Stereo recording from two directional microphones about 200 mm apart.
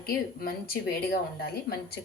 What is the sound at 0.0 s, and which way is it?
Speech, 50° left (ahead or behind).